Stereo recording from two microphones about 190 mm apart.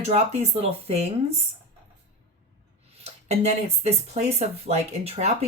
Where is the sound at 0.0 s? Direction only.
35° right (ahead or behind).